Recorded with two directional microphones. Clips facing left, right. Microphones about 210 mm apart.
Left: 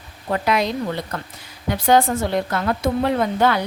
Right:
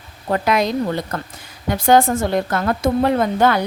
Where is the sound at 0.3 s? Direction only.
45° right (ahead or behind).